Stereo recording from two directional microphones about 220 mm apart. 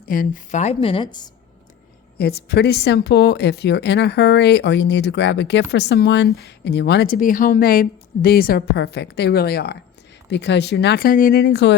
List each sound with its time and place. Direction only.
0.0 s a woman's voice: 40° left (ahead or behind); by 1.3 s 20° left (ahead or behind)
2.1 s speech: 45° left (ahead or behind)